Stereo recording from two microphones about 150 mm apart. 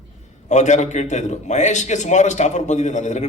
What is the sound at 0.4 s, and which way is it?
A man's voice, 50° left (ahead or behind).